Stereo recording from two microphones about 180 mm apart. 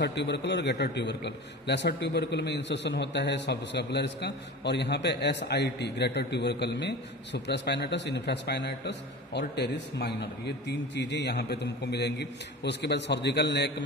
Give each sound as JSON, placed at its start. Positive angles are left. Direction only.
{"t": 0.0, "sound": "a man's voice", "side_deg": 70}